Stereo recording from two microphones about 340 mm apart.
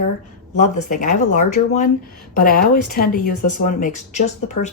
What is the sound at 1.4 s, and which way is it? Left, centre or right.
Speech, left.